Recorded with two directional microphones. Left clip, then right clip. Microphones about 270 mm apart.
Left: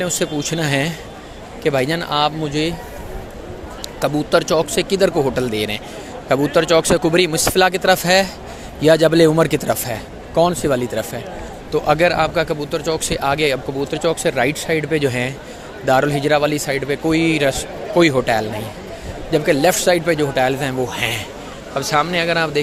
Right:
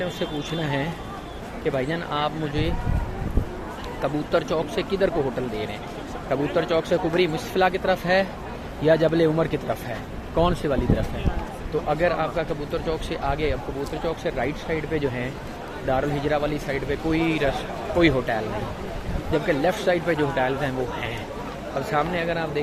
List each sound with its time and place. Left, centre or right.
0.0 s speech: left
4.0 s speech: left